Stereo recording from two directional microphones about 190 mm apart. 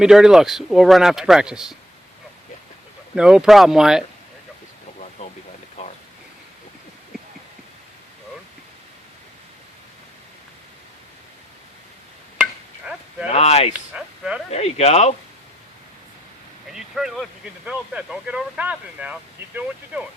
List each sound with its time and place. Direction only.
0.0 s speech: 5° right (ahead or behind)
3.2 s speech: 5° right (ahead or behind)
5.2 s a sound: 35° left (ahead or behind)
12.4 s chop: 5° right (ahead or behind)
13.2 s speech: 35° left (ahead or behind)
13.9 s speech: 5° right (ahead or behind)
14.5 s speech: 35° left (ahead or behind)
16.6 s speech: centre (ahead or behind)